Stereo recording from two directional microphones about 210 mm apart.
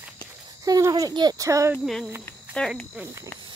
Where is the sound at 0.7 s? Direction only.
15° right (ahead or behind).